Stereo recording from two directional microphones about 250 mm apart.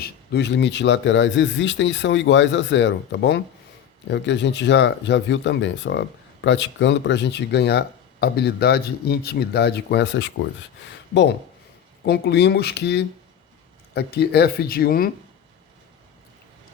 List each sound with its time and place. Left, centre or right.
0.0 s speech: left
12.0 s speech: left